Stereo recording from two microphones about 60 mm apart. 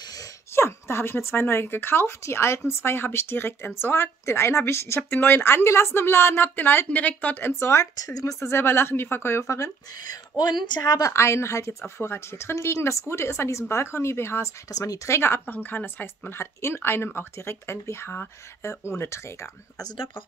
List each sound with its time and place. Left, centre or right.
0.5 s speech: left
7.6 s speech: left
9.9 s speech: left
10.8 s a woman's voice: left
11.1 s speech: left
11.8 s speech: left
13.0 s speech: left
14.7 s speech: left
15.0 s speech: left